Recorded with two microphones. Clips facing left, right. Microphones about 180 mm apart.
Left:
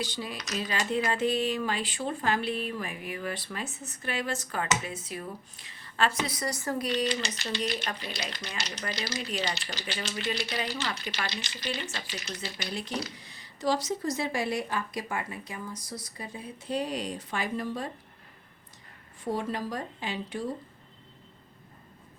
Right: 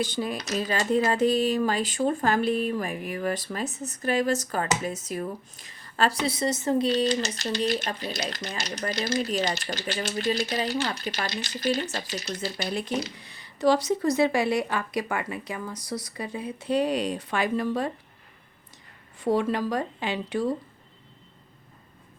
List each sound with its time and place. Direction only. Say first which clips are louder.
0.0 s speech: right 7 dB; 50° right (ahead or behind)
1.0 s speech: right 5 dB; 40° right (ahead or behind)
6.9 s speech: right 5 dB; 40° right (ahead or behind)
12.6 s speech: right 5 dB; 55° right (ahead or behind); by 17.9 s 75° right (ahead or behind)
19.2 s speech: right 7 dB; 75° right (ahead or behind)